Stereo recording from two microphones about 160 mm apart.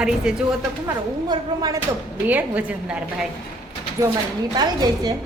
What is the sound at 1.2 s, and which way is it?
Speech, 25° right (ahead or behind).